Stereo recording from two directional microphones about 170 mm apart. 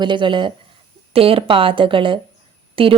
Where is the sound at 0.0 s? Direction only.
30° right (ahead or behind).